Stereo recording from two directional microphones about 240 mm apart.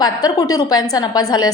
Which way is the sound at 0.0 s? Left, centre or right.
Centre.